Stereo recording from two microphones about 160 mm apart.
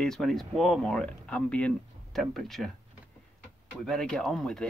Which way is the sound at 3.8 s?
5° left (ahead or behind).